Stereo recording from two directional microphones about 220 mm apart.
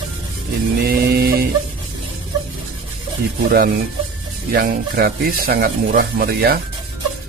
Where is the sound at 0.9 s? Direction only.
45° right (ahead or behind).